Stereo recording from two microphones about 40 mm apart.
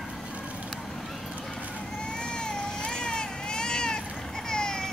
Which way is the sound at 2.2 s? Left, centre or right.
Left.